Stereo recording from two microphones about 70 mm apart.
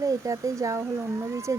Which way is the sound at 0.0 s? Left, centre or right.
Right.